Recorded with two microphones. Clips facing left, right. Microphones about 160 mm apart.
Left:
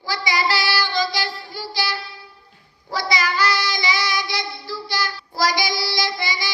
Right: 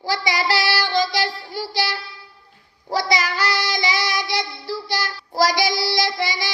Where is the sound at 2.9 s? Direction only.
75° right (ahead or behind).